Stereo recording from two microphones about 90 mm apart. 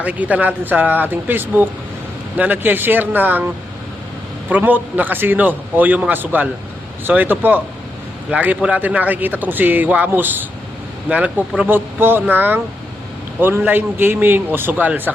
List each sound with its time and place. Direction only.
0.0 s a man's voice: 15° right (ahead or behind)